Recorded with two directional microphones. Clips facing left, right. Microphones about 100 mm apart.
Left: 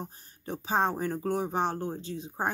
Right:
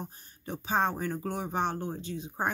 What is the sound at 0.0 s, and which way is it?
Speech, 35° left (ahead or behind).